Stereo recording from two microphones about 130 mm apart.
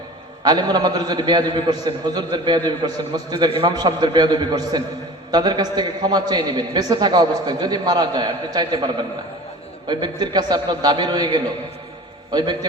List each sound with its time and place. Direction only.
0.4 s a man's voice: 35° right (ahead or behind)